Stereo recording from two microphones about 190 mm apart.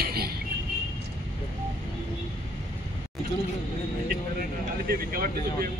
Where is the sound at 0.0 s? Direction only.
55° right (ahead or behind).